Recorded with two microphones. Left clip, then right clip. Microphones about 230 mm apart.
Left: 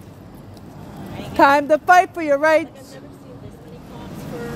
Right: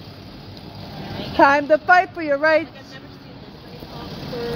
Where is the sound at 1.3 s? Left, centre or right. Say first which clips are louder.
Left 1 dB; centre.